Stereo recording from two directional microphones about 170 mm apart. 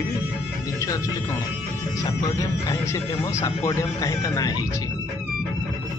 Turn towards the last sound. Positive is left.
turn(degrees=20)  # may be behind; listen again after turning